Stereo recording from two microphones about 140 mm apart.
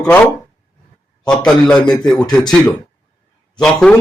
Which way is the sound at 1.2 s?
5° left (ahead or behind).